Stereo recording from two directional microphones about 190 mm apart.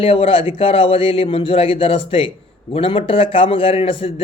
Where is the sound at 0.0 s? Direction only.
30° left (ahead or behind).